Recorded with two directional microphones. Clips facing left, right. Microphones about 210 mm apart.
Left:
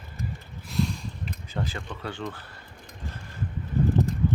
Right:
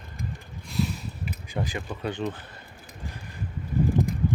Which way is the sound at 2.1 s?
20° right (ahead or behind).